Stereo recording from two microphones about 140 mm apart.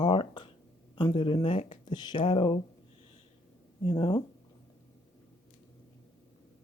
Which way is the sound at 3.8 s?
40° left (ahead or behind).